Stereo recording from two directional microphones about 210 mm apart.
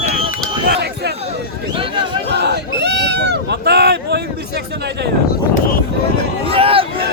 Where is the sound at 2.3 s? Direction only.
50° right (ahead or behind).